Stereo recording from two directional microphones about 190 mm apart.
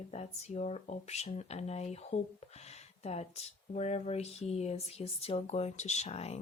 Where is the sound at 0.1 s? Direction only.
35° left (ahead or behind).